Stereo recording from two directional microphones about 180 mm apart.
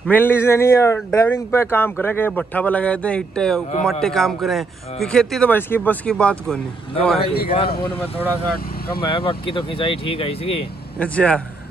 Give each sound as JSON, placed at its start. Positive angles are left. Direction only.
{"t": 0.0, "sound": "speech", "side_deg": 10}
{"t": 7.2, "sound": "a man's voice", "side_deg": 60}
{"t": 7.5, "sound": "speech", "side_deg": 30}
{"t": 9.0, "sound": "speech", "side_deg": 30}
{"t": 11.0, "sound": "speech", "side_deg": 5}